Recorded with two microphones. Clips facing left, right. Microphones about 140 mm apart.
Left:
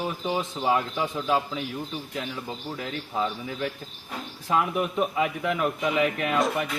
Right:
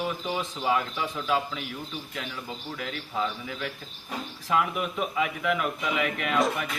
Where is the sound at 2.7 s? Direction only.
30° left (ahead or behind).